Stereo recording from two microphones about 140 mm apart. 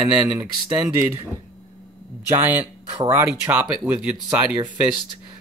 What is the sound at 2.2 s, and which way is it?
Speech, 15° right (ahead or behind).